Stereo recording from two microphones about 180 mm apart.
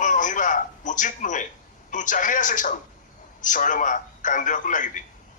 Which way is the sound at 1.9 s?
45° left (ahead or behind).